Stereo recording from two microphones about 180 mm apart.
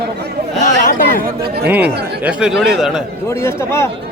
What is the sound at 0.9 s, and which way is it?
Chatter, 50° left (ahead or behind).